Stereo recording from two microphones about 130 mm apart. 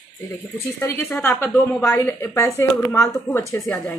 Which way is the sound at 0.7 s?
15° left (ahead or behind).